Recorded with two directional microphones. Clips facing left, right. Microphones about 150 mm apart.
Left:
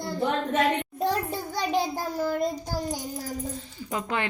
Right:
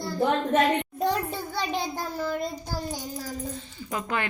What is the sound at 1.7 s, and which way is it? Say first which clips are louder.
Child singing: left 3 dB; 10° left (ahead or behind).